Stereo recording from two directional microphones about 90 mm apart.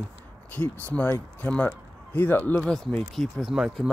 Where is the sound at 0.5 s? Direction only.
20° left (ahead or behind); by 3.9 s 5° right (ahead or behind).